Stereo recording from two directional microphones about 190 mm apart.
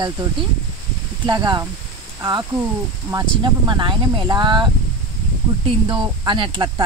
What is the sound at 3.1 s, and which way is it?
Speech, 20° right (ahead or behind).